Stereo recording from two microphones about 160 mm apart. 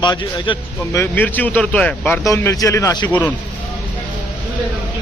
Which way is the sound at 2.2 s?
20° left (ahead or behind).